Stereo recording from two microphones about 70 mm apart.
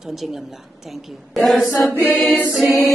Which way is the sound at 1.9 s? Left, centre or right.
Left.